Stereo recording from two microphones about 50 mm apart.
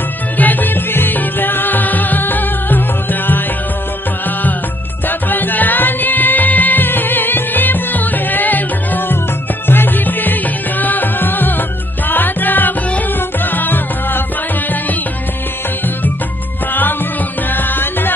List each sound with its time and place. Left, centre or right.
0.4 s music: left
5.0 s music: left
17.5 s music: left